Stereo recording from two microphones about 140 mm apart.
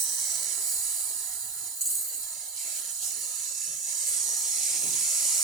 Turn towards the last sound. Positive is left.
turn(degrees=-5)  # may be behind; listen again after turning